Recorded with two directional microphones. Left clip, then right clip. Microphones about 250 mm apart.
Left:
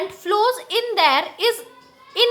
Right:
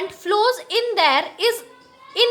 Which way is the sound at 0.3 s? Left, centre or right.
Centre.